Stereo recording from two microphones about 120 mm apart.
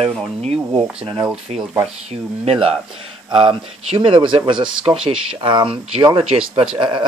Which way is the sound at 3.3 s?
45° right (ahead or behind).